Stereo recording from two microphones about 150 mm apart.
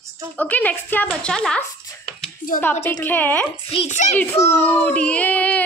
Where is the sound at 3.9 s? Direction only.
50° left (ahead or behind).